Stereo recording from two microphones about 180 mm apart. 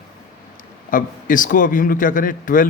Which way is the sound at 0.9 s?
50° left (ahead or behind).